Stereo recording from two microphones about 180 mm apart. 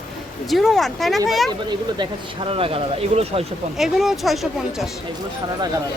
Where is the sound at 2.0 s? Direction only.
30° right (ahead or behind).